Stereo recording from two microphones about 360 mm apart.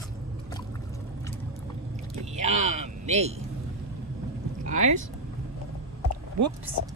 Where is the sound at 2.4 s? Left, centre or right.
Centre.